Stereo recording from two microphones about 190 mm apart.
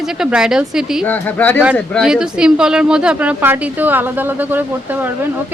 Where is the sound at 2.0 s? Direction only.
5° right (ahead or behind).